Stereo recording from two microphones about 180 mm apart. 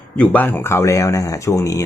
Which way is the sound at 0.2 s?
10° left (ahead or behind).